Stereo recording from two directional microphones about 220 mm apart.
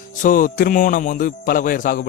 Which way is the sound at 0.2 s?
35° left (ahead or behind).